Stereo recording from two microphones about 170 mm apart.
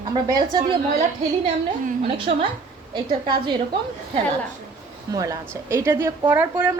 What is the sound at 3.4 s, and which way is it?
A woman's voice, 25° right (ahead or behind).